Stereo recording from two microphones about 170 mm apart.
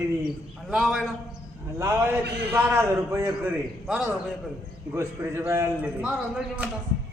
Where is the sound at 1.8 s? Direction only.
15° right (ahead or behind).